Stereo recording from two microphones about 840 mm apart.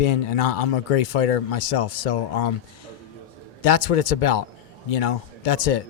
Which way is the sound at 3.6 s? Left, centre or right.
Left.